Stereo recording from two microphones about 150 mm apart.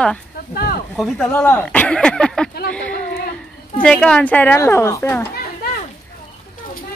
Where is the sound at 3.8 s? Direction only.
5° left (ahead or behind).